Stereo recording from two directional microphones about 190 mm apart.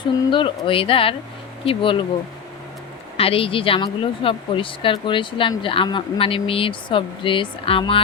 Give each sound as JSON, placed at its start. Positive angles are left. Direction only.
{"t": 0.3, "sound": "speech", "side_deg": 25}
{"t": 3.2, "sound": "speech", "side_deg": 30}